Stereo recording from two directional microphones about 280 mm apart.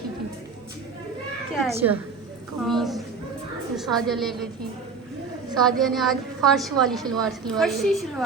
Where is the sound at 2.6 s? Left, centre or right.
Centre.